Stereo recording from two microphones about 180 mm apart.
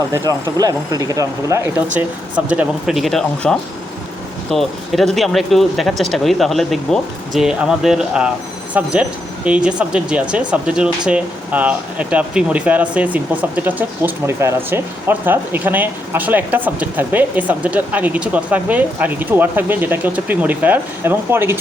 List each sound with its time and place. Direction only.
0.6 s speech: 20° right (ahead or behind)